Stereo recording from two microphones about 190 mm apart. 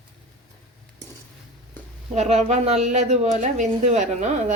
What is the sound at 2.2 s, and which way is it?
A woman's voice, 35° right (ahead or behind).